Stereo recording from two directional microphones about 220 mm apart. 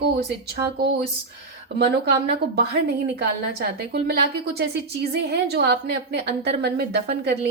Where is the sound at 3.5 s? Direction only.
50° right (ahead or behind).